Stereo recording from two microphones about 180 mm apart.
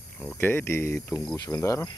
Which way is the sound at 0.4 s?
10° left (ahead or behind).